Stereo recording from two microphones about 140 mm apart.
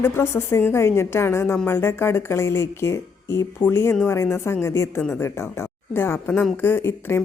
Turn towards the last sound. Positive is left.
turn(degrees=15)  # may be behind; listen again after turning